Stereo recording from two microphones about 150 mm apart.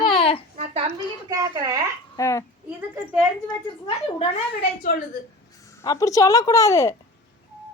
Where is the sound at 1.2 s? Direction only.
25° right (ahead or behind).